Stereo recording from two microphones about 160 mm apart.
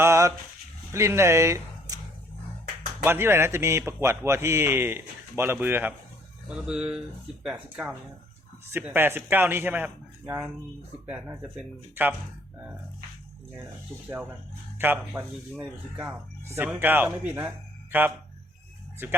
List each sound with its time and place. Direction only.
0.0 s a sound: 15° right (ahead or behind)
0.9 s speech: 15° right (ahead or behind)
3.0 s speech: 15° right (ahead or behind)
14.8 s speech: 10° right (ahead or behind)